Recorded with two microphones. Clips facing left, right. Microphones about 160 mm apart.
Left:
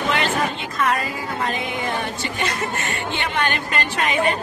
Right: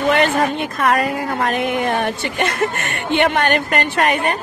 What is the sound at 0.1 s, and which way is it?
Speech, 55° right (ahead or behind).